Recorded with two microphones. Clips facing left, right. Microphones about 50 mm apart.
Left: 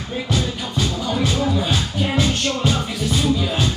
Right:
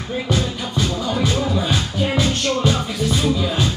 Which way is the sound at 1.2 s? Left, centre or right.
Right.